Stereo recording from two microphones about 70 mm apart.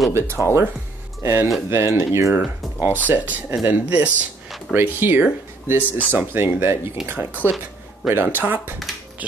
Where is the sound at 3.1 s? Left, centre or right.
Right.